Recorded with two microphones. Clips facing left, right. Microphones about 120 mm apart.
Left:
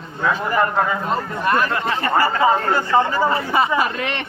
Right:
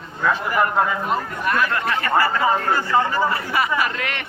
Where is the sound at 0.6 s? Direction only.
5° right (ahead or behind).